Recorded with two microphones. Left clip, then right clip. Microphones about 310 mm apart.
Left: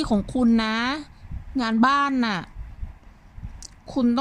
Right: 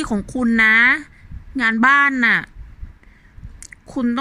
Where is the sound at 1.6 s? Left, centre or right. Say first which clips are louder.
Right 7 dB; centre.